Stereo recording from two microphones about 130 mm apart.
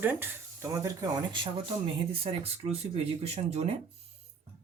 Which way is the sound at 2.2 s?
50° right (ahead or behind).